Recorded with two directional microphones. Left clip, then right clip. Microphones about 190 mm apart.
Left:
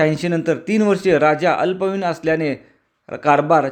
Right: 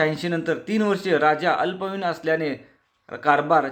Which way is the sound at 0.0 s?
35° left (ahead or behind).